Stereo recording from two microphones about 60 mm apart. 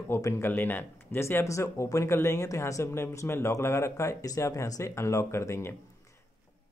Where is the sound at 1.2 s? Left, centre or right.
Left.